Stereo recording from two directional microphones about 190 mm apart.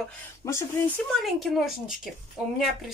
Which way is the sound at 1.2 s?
Centre (ahead or behind).